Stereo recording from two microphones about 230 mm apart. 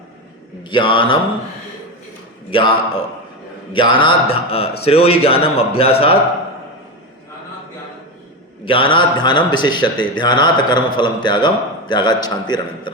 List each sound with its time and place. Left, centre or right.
0.6 s a man's voice: left
2.5 s a man's voice: left
8.6 s a man's voice: left